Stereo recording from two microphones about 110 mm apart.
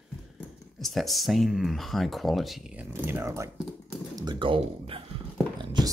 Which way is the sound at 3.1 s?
25° right (ahead or behind).